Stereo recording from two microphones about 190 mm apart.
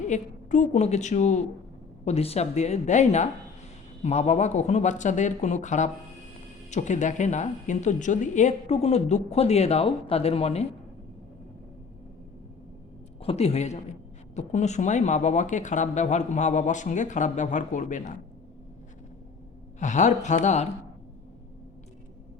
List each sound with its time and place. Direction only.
0.1 s speech: 40° left (ahead or behind)
13.2 s speech: 35° left (ahead or behind)
19.8 s speech: 40° left (ahead or behind)